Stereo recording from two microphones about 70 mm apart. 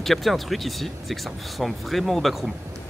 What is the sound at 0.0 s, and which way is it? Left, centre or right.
Speech, centre.